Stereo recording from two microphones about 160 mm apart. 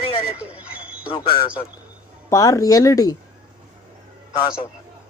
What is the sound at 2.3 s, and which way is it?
Speech, 20° left (ahead or behind).